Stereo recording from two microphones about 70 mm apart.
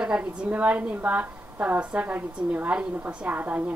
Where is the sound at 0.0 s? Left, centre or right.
Centre.